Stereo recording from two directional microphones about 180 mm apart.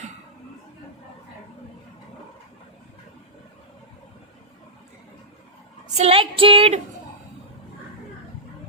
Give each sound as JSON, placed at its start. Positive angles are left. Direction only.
{"t": 5.9, "sound": "child singing", "side_deg": -35}